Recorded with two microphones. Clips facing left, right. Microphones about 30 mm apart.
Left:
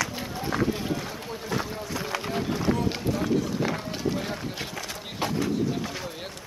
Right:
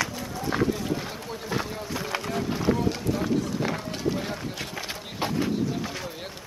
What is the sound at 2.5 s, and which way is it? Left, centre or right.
Run, centre.